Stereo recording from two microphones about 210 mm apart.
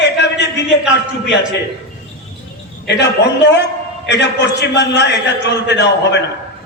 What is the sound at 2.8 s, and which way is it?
A man's voice, 55° left (ahead or behind).